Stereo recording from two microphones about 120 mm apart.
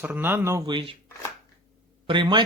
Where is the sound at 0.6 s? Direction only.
40° right (ahead or behind).